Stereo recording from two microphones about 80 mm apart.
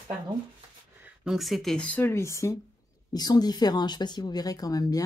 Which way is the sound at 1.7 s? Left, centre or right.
Centre.